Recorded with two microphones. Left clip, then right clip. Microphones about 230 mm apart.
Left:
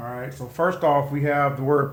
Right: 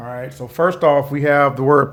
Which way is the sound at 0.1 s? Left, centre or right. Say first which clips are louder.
Right 5 dB; right.